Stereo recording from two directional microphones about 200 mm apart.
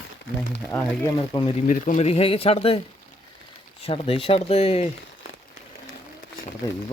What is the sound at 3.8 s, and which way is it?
A man's voice, 30° left (ahead or behind).